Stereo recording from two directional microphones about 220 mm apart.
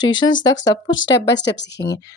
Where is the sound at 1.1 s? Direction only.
50° left (ahead or behind).